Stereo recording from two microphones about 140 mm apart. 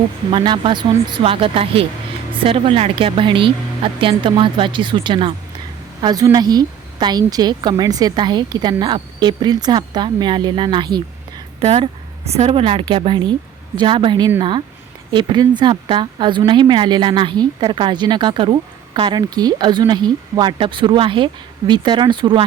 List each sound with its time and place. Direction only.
0.3 s a woman's voice: 35° right (ahead or behind)
11.6 s a woman's voice: 45° right (ahead or behind)